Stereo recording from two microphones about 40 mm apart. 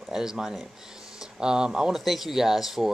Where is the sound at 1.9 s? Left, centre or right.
Centre.